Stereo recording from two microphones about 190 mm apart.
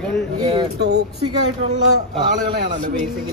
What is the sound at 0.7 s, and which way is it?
Speech, 60° right (ahead or behind).